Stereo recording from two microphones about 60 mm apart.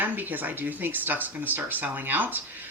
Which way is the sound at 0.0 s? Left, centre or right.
Right.